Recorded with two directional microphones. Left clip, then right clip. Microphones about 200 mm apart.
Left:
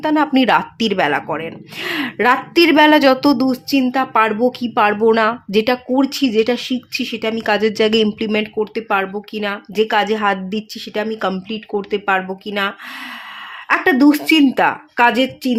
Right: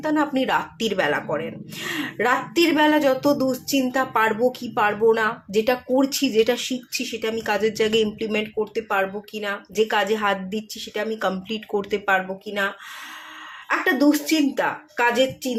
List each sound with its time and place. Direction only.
0.0 s speech: 45° left (ahead or behind)
11.4 s speech: 20° left (ahead or behind); by 12.7 s 40° left (ahead or behind)
13.7 s speech: 55° left (ahead or behind)